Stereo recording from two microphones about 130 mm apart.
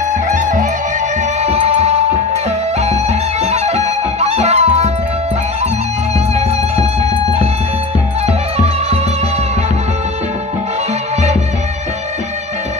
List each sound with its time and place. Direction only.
0.3 s music: 75° right (ahead or behind)
1.4 s music: 50° right (ahead or behind)